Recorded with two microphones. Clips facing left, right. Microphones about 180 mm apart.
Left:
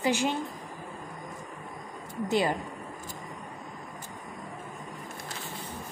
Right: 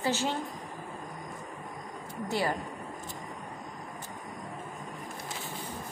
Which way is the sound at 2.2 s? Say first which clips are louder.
Left 4 dB; 20° left (ahead or behind).